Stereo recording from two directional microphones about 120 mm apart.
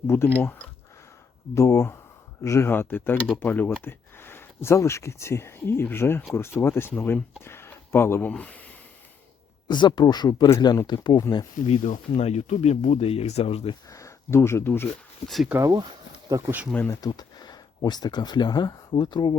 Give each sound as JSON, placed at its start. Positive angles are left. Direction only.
{"t": 0.1, "sound": "speech", "side_deg": 15}
{"t": 1.5, "sound": "speech", "side_deg": 25}
{"t": 9.6, "sound": "speech", "side_deg": 40}
{"t": 11.5, "sound": "speech", "side_deg": 80}
{"t": 13.9, "sound": "speech", "side_deg": 25}
{"t": 15.3, "sound": "speech", "side_deg": 0}
{"t": 15.5, "sound": "speech", "side_deg": -30}
{"t": 16.9, "sound": "speech", "side_deg": 35}